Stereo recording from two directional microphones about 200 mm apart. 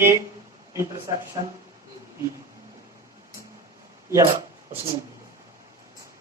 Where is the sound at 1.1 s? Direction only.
20° right (ahead or behind).